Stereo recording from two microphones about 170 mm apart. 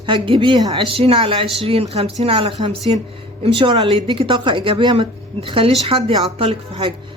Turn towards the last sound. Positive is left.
turn(degrees=-35)  # may be behind; listen again after turning